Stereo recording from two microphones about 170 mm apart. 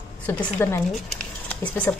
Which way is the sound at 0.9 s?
Centre (ahead or behind).